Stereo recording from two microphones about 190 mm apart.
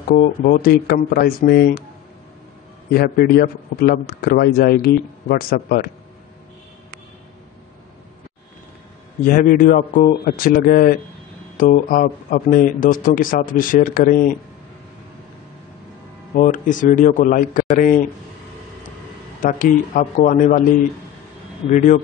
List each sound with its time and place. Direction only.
0.1 s a man's voice: 45° left (ahead or behind)
2.9 s a man's voice: 55° left (ahead or behind)
9.2 s a man's voice: 45° left (ahead or behind)
16.3 s a man's voice: 45° left (ahead or behind)
19.4 s a man's voice: 45° left (ahead or behind)
21.6 s speech: 40° left (ahead or behind)